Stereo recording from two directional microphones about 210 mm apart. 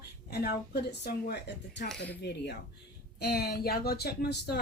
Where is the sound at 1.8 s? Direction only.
5° left (ahead or behind).